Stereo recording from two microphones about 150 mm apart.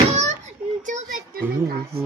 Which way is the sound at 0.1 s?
50° right (ahead or behind).